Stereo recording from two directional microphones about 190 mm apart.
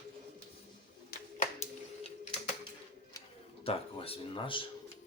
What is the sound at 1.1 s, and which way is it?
Clapping, 55° left (ahead or behind).